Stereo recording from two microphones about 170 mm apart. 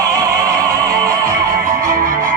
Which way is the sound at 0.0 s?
20° right (ahead or behind).